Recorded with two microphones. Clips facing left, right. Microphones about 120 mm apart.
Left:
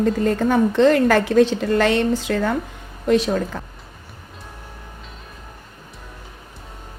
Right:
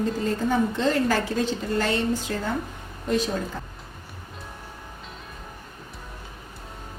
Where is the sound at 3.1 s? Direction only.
70° left (ahead or behind).